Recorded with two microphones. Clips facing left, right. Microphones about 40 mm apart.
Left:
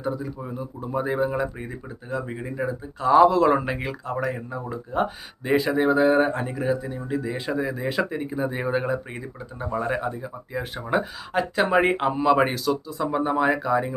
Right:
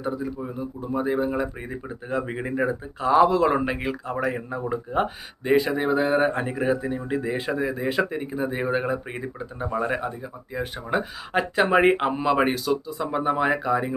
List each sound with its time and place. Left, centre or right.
0.0 s speech: centre
2.0 s speech: right
3.0 s speech: centre; by 4.9 s right
5.5 s speech: centre